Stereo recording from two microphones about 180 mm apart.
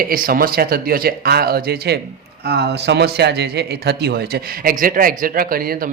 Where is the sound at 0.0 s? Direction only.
55° right (ahead or behind).